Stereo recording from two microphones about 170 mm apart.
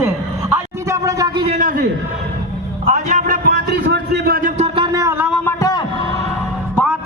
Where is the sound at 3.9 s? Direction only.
70° right (ahead or behind); by 5.2 s 15° right (ahead or behind).